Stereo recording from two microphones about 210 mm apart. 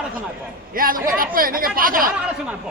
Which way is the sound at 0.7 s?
45° right (ahead or behind).